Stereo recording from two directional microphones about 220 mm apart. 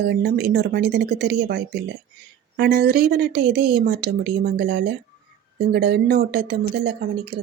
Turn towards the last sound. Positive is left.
turn(degrees=-45)  # may be behind; listen again after turning